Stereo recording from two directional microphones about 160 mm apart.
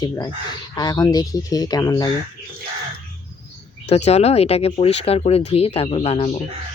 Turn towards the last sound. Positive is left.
turn(degrees=35)  # may be behind; listen again after turning